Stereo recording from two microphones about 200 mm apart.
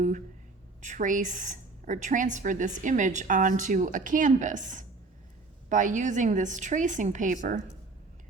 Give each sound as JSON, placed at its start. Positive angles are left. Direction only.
{"t": 0.8, "sound": "a woman's voice", "side_deg": -40}